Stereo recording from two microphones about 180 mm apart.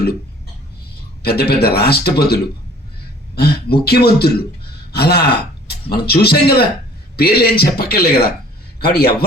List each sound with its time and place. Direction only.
1.2 s speech: 60° left (ahead or behind)